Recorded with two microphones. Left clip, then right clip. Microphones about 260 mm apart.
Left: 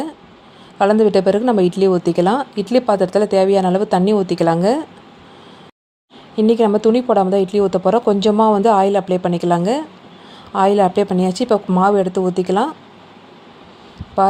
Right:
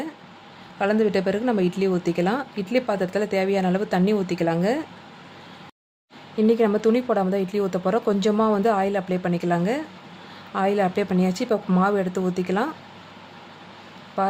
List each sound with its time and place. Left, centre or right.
0.8 s a woman's voice: centre
6.3 s a woman's voice: centre
14.2 s speech: centre